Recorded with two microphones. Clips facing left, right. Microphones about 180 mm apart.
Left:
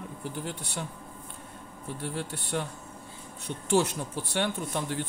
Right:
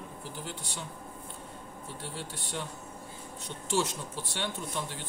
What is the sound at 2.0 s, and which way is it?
Speech, 60° left (ahead or behind).